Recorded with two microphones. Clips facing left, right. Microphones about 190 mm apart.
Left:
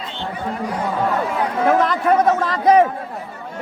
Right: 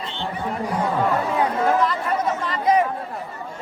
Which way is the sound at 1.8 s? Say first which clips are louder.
Left 6 dB; 85° left.